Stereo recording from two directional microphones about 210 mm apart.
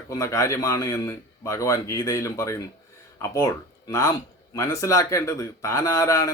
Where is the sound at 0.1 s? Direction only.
15° left (ahead or behind).